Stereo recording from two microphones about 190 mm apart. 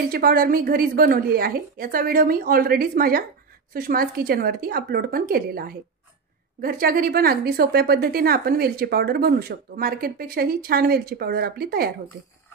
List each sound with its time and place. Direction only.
0.1 s a woman's voice: 50° right (ahead or behind)